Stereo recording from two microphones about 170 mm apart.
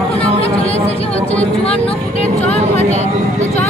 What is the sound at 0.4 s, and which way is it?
Chatter, 35° left (ahead or behind).